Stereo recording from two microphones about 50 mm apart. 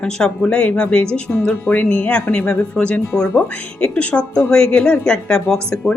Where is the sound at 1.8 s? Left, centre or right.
Left.